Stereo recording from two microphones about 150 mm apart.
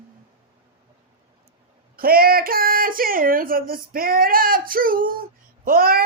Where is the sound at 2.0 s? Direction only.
75° right (ahead or behind).